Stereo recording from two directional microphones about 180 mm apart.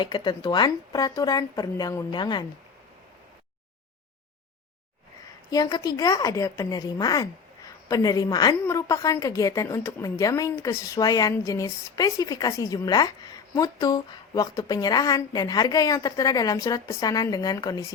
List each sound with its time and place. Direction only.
0.0 s a woman's voice: 25° left (ahead or behind)
5.5 s a woman's voice: 20° left (ahead or behind)